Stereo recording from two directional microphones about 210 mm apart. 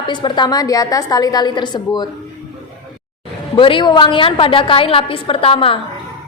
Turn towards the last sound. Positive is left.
turn(degrees=25)  # may be behind; listen again after turning